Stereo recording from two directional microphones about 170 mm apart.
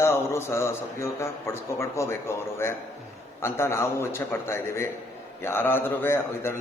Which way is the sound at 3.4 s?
15° left (ahead or behind).